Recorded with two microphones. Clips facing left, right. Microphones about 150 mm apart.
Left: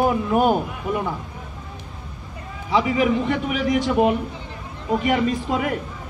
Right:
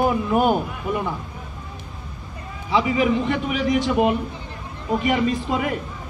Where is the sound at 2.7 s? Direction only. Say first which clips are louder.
Even; 55° left (ahead or behind).